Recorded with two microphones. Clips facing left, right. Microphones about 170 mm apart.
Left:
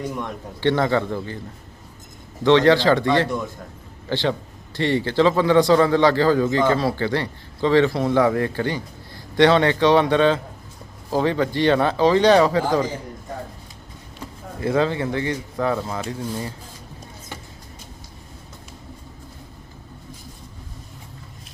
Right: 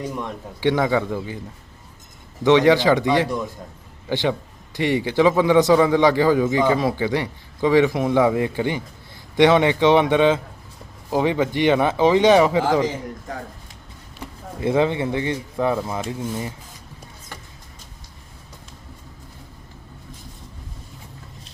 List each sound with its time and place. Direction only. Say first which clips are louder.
0.0 s a man's voice: even; 5° right (ahead or behind)
2.4 s a man's voice: even; 15° right (ahead or behind)
14.6 s speech: right 1 dB; 20° right (ahead or behind)